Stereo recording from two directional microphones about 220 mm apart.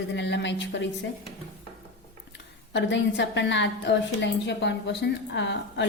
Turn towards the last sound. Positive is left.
turn(degrees=55)  # may be behind; listen again after turning